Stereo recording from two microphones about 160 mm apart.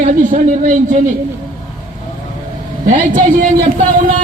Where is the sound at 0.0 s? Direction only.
55° right (ahead or behind).